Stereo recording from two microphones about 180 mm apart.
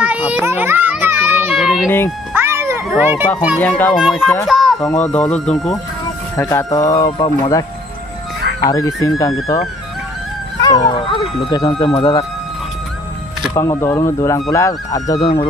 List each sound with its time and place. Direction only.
0.0 s children playing: 10° right (ahead or behind)
2.3 s music: 15° right (ahead or behind)
3.0 s speech: 10° right (ahead or behind)
3.5 s speech: 10° left (ahead or behind)
6.3 s speech: 15° left (ahead or behind)
8.6 s speech: 20° left (ahead or behind)
10.6 s speech: 20° left (ahead or behind)
13.6 s speech: 15° left (ahead or behind)